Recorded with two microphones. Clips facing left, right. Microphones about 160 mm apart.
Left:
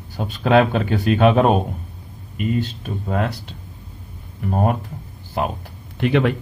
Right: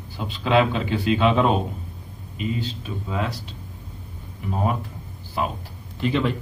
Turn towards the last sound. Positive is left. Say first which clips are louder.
# left 5 dB
turn(degrees=65)  # may be behind; listen again after turning